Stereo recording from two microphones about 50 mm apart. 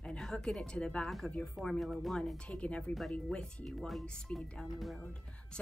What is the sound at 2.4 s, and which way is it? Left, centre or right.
A woman's voice, left.